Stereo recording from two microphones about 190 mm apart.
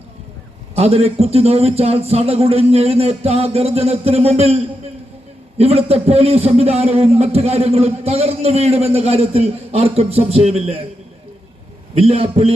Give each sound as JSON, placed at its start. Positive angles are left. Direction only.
{"t": 0.8, "sound": "a man's voice", "side_deg": -30}
{"t": 11.9, "sound": "a man's voice", "side_deg": -30}